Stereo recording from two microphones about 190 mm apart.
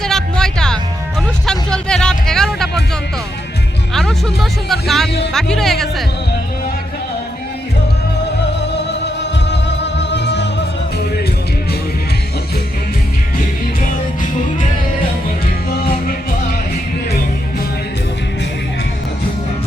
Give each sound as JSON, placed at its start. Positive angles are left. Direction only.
{"t": 0.0, "sound": "music", "side_deg": 5}
{"t": 3.9, "sound": "music", "side_deg": 0}
{"t": 9.5, "sound": "music", "side_deg": 65}